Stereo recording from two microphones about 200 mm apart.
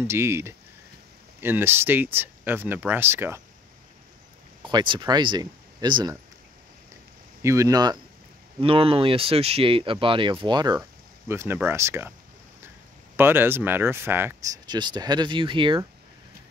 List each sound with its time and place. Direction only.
0.0 s speech: 15° right (ahead or behind)
4.6 s speech: 25° right (ahead or behind)
7.4 s speech: 15° right (ahead or behind)
13.1 s speech: 10° right (ahead or behind)